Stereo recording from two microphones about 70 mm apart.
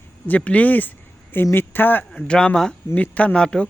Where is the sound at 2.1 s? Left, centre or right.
Centre.